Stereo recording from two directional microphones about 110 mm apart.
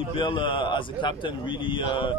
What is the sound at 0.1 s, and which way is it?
A man's voice, 50° left (ahead or behind).